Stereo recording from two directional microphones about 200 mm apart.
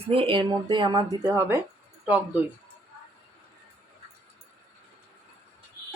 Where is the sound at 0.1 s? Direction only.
25° right (ahead or behind).